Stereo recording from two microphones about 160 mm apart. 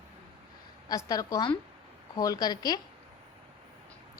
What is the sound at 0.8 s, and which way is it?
A woman's voice, 25° left (ahead or behind).